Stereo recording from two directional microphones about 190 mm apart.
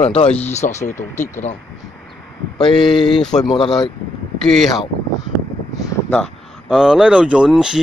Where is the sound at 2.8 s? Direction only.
Centre (ahead or behind).